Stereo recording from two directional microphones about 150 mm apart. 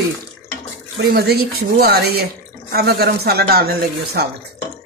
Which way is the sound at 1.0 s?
90° right.